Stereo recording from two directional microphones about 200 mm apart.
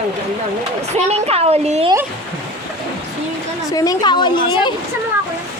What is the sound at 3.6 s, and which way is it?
A woman's voice, 15° left (ahead or behind).